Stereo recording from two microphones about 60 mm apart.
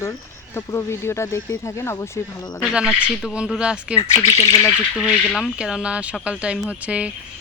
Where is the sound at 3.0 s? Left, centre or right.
Centre.